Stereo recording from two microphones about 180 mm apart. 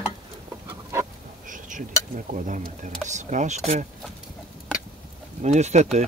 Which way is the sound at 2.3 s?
45° right (ahead or behind).